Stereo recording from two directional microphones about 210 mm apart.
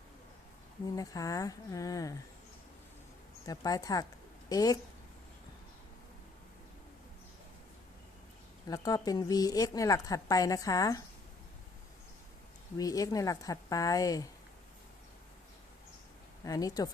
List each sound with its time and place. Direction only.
0.9 s a woman's voice: 15° left (ahead or behind)
3.4 s a woman's voice: 15° left (ahead or behind)
8.6 s a woman's voice: 15° left (ahead or behind)
12.7 s a woman's voice: 15° left (ahead or behind)
16.4 s a woman's voice: 15° left (ahead or behind)